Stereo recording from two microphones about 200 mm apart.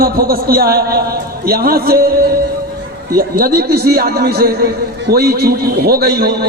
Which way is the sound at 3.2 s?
50° right (ahead or behind).